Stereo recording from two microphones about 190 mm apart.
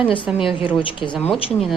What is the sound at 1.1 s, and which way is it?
Speech, 5° left (ahead or behind).